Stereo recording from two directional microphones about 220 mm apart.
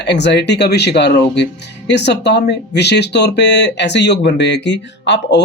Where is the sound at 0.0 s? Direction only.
50° left (ahead or behind).